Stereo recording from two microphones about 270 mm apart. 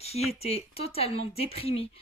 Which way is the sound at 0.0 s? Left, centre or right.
Left.